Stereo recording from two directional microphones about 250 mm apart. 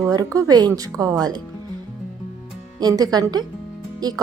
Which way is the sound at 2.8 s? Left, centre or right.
Centre.